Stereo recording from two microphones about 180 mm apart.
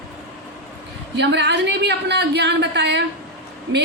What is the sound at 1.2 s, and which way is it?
A woman's voice, 75° right (ahead or behind).